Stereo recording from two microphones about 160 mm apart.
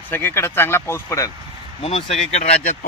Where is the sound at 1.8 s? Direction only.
40° left (ahead or behind).